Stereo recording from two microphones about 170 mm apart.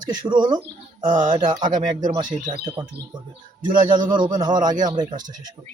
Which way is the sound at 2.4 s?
25° right (ahead or behind).